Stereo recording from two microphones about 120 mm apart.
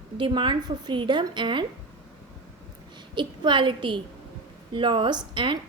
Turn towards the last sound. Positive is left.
turn(degrees=-40)  # may be behind; listen again after turning